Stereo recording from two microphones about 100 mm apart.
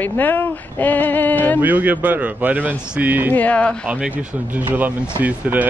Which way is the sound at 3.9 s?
15° right (ahead or behind).